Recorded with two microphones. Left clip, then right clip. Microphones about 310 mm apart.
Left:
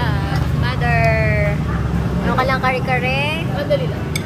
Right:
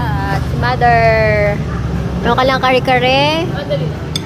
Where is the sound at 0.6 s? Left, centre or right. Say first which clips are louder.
Right 9 dB; centre.